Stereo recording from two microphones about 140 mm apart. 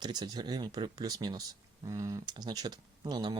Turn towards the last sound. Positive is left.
turn(degrees=-30)  # may be behind; listen again after turning